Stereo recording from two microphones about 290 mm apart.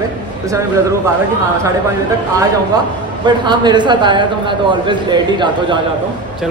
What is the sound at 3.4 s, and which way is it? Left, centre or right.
A man's voice, centre.